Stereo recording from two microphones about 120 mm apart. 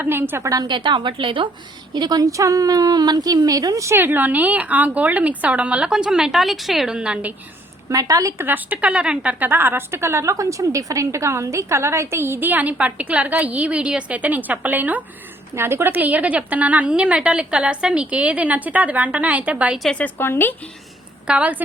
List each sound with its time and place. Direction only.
0.0 s a woman's voice: 20° right (ahead or behind)
7.9 s a woman's voice: 30° right (ahead or behind)
8.4 s a woman's voice: 15° right (ahead or behind)
19.8 s speech: 5° left (ahead or behind)
20.1 s speech: 20° left (ahead or behind)
21.2 s a woman's voice: 10° right (ahead or behind)